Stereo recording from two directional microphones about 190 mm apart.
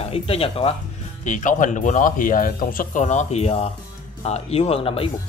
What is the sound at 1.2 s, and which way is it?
Speech, 40° left (ahead or behind).